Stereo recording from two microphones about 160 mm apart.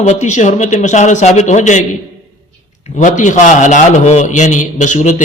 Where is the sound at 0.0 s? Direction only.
45° left (ahead or behind).